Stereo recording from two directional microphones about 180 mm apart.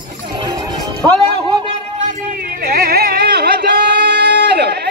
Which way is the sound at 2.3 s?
55° right (ahead or behind).